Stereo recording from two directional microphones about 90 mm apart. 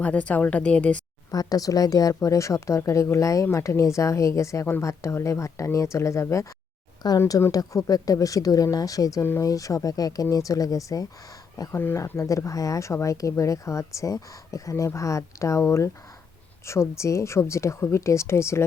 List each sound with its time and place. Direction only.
0.0 s a woman's voice: 15° left (ahead or behind)
1.3 s speech: 45° left (ahead or behind)
7.0 s speech: 50° left (ahead or behind)
7.5 s speech: 40° left (ahead or behind)
11.7 s speech: 25° left (ahead or behind)
11.9 s speech: 35° left (ahead or behind)